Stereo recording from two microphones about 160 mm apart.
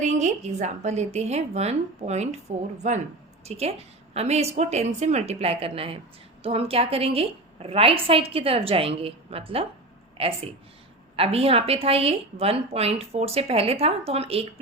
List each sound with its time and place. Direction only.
0.0 s a woman's voice: 50° right (ahead or behind)